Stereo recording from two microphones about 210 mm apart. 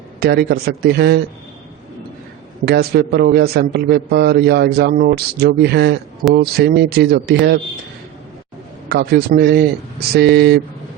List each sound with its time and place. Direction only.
0.2 s a man's voice: 50° right (ahead or behind)
2.6 s a man's voice: 50° right (ahead or behind)
8.9 s a man's voice: 50° right (ahead or behind)